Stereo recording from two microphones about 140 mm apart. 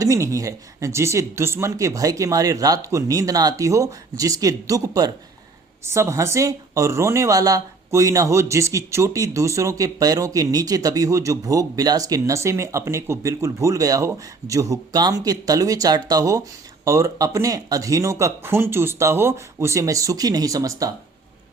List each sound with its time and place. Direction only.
0.0 s speech: 25° right (ahead or behind)